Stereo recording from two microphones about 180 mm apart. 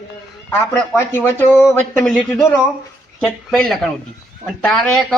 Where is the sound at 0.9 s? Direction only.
10° left (ahead or behind).